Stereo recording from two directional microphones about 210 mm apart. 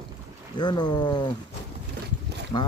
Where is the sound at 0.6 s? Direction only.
20° left (ahead or behind).